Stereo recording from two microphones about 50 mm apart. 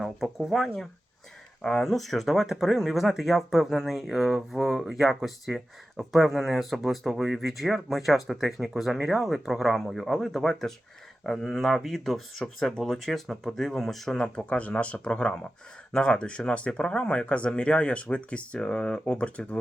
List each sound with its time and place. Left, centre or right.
0.0 s speech: centre; by 19.5 s left